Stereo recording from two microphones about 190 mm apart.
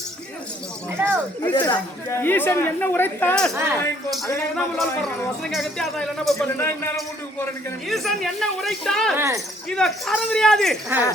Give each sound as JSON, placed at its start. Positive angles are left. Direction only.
{"t": 0.9, "sound": "speech", "side_deg": -10}
{"t": 1.5, "sound": "speech", "side_deg": 25}
{"t": 2.0, "sound": "speech", "side_deg": 10}
{"t": 3.5, "sound": "speech", "side_deg": -15}
{"t": 4.3, "sound": "speech", "side_deg": 10}
{"t": 4.8, "sound": "speech", "side_deg": 0}
{"t": 7.9, "sound": "speech", "side_deg": 0}
{"t": 9.1, "sound": "speech", "side_deg": -15}
{"t": 9.6, "sound": "speech", "side_deg": 5}